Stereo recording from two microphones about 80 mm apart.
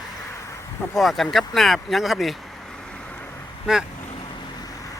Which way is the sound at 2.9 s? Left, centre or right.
Centre.